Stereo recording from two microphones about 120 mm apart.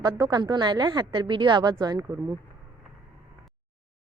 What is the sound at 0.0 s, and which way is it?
A woman's voice, 35° right (ahead or behind).